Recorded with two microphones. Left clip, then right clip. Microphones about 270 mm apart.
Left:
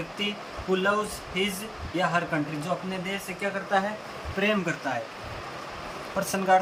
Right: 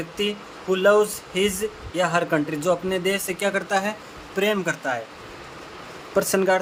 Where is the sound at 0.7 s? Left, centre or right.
Centre.